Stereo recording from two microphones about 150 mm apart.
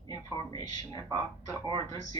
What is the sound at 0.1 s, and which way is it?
Speech, 25° left (ahead or behind).